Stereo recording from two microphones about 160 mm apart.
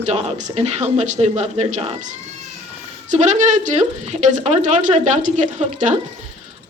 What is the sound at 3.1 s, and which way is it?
A woman's voice, 50° right (ahead or behind).